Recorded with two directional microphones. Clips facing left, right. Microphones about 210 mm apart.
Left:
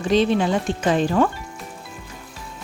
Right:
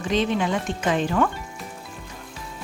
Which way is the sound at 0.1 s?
35° left (ahead or behind).